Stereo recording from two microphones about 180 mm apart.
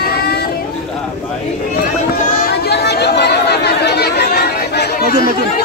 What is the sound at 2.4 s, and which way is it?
Chatter, 65° left (ahead or behind).